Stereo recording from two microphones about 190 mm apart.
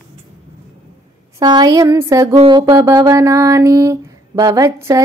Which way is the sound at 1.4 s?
20° right (ahead or behind).